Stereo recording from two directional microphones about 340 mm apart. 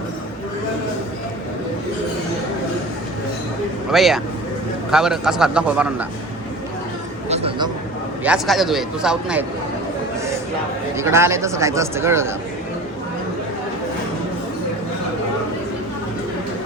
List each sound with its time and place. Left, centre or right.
3.9 s a man's voice: centre
7.3 s a sound: centre
8.2 s a man's voice: centre
10.9 s speech: centre